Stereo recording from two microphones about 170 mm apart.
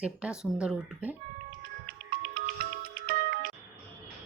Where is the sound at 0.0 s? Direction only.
5° right (ahead or behind).